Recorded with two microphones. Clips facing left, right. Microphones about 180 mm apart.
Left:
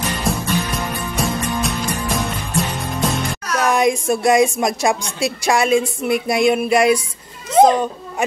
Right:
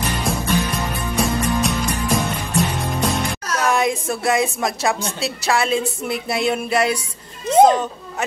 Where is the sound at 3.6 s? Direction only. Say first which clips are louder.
Left 3 dB; 15° left (ahead or behind).